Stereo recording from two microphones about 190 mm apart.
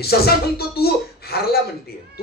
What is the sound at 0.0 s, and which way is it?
Speech, 55° left (ahead or behind).